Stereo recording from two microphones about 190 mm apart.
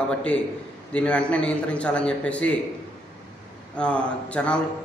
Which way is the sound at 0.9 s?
5° left (ahead or behind).